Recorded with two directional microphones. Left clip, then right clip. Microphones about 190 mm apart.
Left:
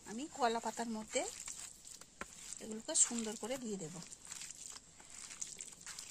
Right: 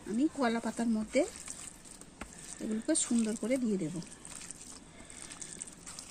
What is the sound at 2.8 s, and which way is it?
Speech, 60° left (ahead or behind).